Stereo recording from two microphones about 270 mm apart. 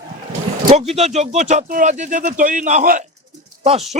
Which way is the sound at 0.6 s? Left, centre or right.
Right.